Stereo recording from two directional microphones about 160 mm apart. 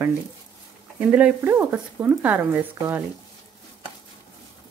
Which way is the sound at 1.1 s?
10° right (ahead or behind).